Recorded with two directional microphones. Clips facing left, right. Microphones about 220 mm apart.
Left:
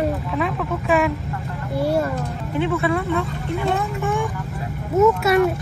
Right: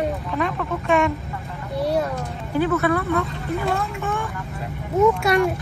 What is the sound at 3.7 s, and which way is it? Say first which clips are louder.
Vehicle: left 3 dB; 15° left (ahead or behind).